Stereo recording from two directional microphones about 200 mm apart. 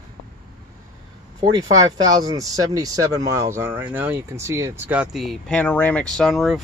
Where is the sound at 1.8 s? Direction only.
20° right (ahead or behind); by 6.6 s centre (ahead or behind).